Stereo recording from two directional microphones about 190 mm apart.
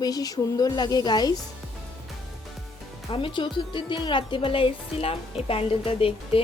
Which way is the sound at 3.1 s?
25° left (ahead or behind).